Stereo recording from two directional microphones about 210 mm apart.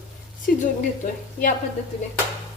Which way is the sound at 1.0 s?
40° left (ahead or behind).